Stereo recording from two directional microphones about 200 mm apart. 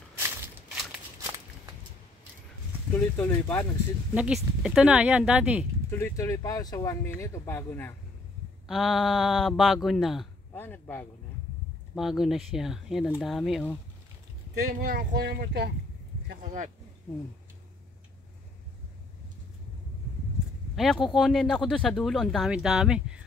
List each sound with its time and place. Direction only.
2.9 s speech: 10° left (ahead or behind)
4.1 s speech: 5° right (ahead or behind)
5.9 s speech: 10° left (ahead or behind)
8.6 s speech: centre (ahead or behind)
10.5 s speech: 10° left (ahead or behind)
11.9 s speech: centre (ahead or behind)
14.6 s speech: 45° right (ahead or behind)
16.3 s speech: 40° right (ahead or behind)
20.7 s speech: centre (ahead or behind)